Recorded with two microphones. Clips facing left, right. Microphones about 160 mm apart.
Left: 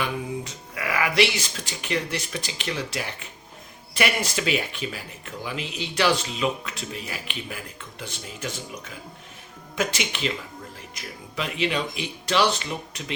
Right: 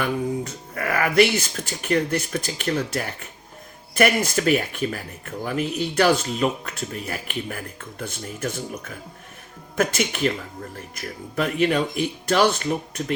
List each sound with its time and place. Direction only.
0.0 s speech: 50° right (ahead or behind)